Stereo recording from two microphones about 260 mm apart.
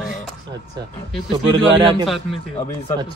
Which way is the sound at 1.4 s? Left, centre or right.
Centre.